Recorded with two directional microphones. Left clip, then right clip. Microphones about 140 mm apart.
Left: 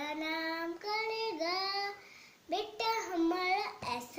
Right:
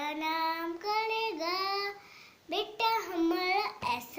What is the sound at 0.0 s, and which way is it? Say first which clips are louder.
Child singing: right 5 dB; 20° right (ahead or behind).